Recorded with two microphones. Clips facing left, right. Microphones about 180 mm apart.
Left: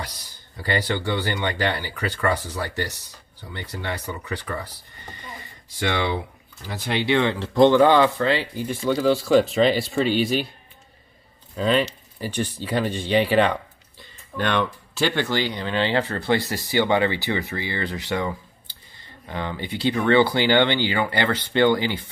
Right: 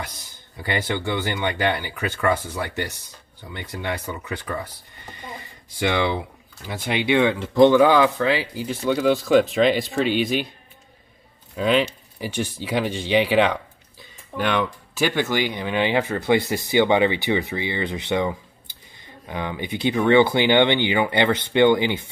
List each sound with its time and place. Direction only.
0.6 s speech: 20° right (ahead or behind)
5.8 s speech: 20° right (ahead or behind); by 9.8 s centre (ahead or behind)
11.5 s speech: 5° right (ahead or behind)